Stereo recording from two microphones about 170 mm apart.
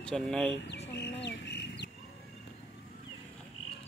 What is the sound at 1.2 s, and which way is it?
Chicken, 90° left.